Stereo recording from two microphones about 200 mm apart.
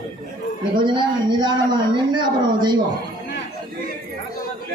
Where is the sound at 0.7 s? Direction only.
25° right (ahead or behind).